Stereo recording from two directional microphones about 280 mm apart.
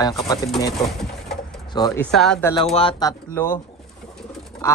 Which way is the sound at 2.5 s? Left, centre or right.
Centre.